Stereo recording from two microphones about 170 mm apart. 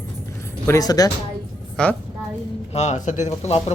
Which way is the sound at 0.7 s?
20° left (ahead or behind).